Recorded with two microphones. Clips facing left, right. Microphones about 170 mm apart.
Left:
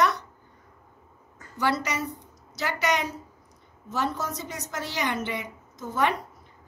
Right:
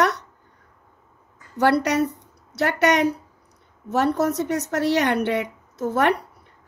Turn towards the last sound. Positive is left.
turn(degrees=-70)  # may be behind; listen again after turning